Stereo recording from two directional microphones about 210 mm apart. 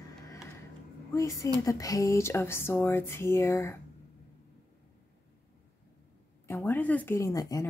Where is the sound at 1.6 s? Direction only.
15° left (ahead or behind).